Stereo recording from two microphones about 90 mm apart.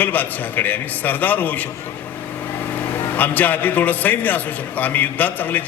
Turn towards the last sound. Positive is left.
turn(degrees=20)  # may be behind; listen again after turning